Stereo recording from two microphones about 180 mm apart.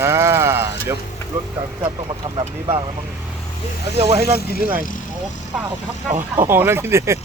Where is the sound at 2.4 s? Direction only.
30° right (ahead or behind).